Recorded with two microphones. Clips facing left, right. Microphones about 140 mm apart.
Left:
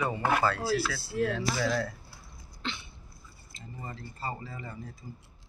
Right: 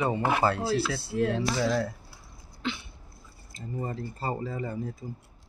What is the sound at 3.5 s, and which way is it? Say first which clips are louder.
Speech: right 9 dB; 40° right (ahead or behind).